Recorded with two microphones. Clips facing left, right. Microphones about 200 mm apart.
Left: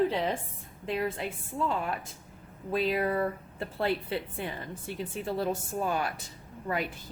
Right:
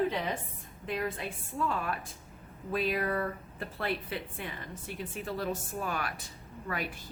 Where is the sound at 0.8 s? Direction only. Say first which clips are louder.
Left 3 dB; 25° left (ahead or behind).